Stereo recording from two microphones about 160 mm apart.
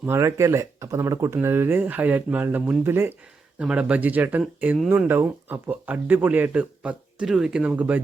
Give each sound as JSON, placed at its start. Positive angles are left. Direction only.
{"t": 0.0, "sound": "speech", "side_deg": -15}